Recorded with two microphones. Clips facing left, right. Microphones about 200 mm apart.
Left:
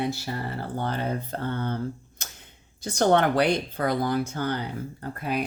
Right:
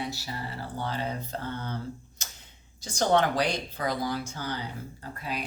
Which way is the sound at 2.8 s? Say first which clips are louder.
Left 3 dB; 55° left (ahead or behind).